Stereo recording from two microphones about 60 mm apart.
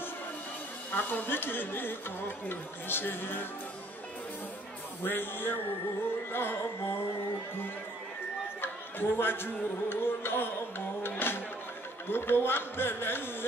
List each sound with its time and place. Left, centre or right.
0.9 s speech: left
5.0 s speech: left
8.5 s speech: left
11.0 s music: left
12.1 s speech: left